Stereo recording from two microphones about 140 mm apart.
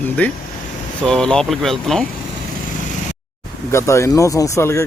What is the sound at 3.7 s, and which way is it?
Speech, 20° left (ahead or behind).